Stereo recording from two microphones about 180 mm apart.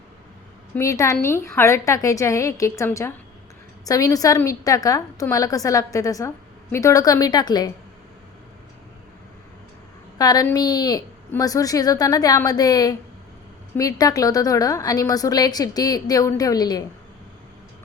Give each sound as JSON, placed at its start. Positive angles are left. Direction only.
{"t": 0.8, "sound": "a woman's voice", "side_deg": 15}
{"t": 10.2, "sound": "a woman's voice", "side_deg": 20}